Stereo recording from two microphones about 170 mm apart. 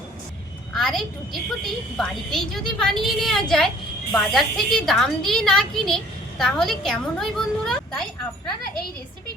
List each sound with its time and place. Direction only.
0.7 s a woman's voice: centre (ahead or behind)